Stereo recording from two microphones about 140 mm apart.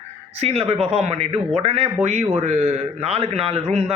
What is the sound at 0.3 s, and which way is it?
A man's voice, 50° right (ahead or behind).